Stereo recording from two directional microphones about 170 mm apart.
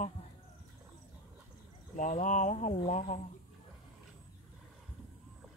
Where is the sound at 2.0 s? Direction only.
45° left (ahead or behind).